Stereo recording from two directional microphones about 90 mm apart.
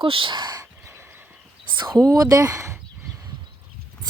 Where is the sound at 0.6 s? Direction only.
30° right (ahead or behind).